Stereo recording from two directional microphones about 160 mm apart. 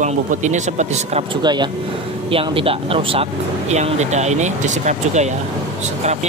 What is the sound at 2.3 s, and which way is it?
Speech, 35° right (ahead or behind).